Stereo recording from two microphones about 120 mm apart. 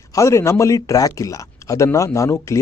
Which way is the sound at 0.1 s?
25° left (ahead or behind).